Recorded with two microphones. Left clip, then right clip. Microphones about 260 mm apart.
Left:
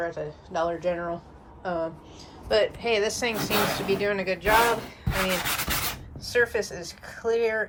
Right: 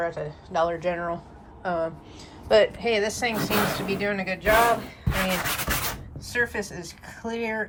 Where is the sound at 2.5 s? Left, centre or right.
Centre.